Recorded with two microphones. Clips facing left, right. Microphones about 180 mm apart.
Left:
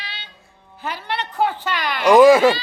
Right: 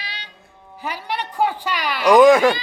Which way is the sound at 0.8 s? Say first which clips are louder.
Even; 10° right (ahead or behind).